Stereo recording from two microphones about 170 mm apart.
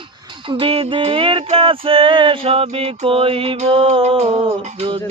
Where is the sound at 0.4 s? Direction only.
30° right (ahead or behind).